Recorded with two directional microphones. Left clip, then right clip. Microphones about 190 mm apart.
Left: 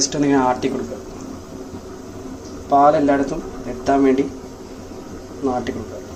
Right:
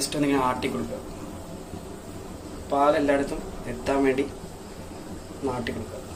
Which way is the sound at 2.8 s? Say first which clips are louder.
Left 7 dB; 25° left (ahead or behind).